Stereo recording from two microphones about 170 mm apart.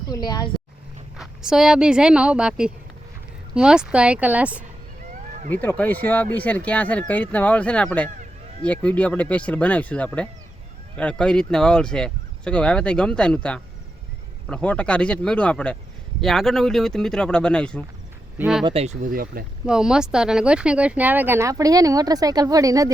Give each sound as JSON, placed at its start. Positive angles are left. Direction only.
{"t": 0.1, "sound": "speech", "side_deg": 25}
{"t": 1.1, "sound": "speech", "side_deg": -5}
{"t": 5.5, "sound": "speech", "side_deg": 10}
{"t": 18.6, "sound": "speech", "side_deg": -35}
{"t": 19.1, "sound": "speech", "side_deg": -60}
{"t": 19.6, "sound": "speech", "side_deg": -5}